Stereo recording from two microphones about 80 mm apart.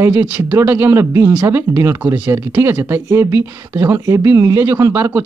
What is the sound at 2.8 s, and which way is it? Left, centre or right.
Speech, right.